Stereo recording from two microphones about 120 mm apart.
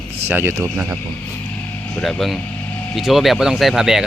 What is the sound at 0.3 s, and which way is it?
Speech, 20° right (ahead or behind).